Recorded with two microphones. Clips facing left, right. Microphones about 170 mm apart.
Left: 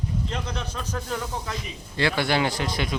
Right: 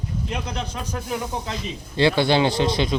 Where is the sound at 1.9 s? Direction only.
25° right (ahead or behind).